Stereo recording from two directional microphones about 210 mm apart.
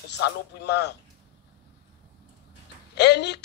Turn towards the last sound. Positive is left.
turn(degrees=55)  # may be behind; listen again after turning